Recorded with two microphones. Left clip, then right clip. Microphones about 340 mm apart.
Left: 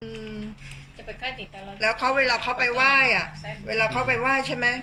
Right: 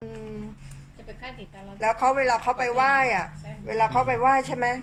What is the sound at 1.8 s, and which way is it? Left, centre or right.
A woman's voice, centre.